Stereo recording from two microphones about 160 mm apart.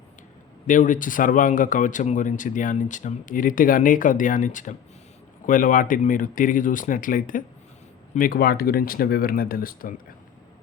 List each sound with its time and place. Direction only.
0.7 s speech: 55° left (ahead or behind)